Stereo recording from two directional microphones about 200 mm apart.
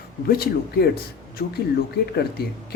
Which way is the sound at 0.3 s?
50° left (ahead or behind).